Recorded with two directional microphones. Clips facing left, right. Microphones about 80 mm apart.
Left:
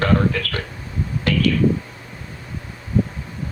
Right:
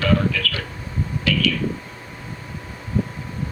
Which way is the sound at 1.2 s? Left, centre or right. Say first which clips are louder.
Left 3 dB; left.